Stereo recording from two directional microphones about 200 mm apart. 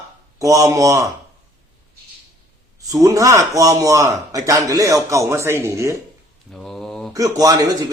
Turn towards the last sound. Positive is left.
turn(degrees=-15)  # may be behind; listen again after turning